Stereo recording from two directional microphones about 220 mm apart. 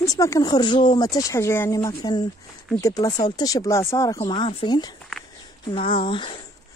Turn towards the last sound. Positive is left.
turn(degrees=25)  # may be behind; listen again after turning